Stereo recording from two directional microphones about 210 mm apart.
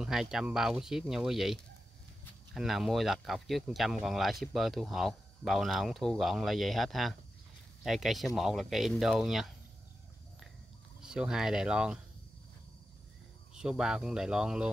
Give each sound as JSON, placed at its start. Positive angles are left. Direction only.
{"t": 0.0, "sound": "speech", "side_deg": 0}
{"t": 11.0, "sound": "speech", "side_deg": -5}
{"t": 13.6, "sound": "speech", "side_deg": -5}